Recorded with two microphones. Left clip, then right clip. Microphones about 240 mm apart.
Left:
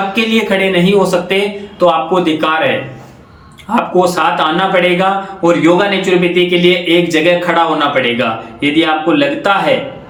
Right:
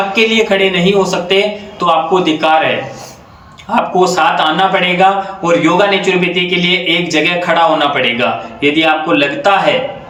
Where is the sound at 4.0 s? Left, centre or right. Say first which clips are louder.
Right 1 dB; centre.